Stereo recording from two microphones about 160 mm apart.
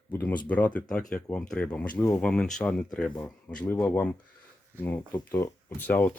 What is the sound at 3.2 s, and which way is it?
Speech, 15° left (ahead or behind).